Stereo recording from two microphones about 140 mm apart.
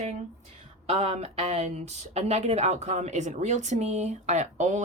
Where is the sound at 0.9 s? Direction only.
50° right (ahead or behind).